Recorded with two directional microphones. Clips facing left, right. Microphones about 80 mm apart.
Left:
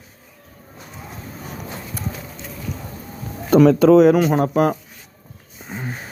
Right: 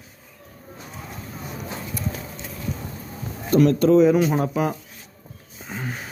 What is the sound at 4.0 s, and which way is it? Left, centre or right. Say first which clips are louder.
Speech: left 3 dB; left.